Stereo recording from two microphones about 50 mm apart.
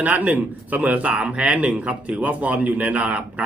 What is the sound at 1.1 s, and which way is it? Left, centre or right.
Speech, centre.